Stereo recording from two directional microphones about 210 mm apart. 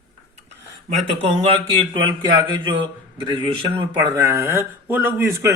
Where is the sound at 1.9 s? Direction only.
20° right (ahead or behind).